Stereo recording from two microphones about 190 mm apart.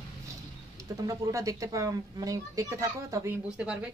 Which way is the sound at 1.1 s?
15° right (ahead or behind).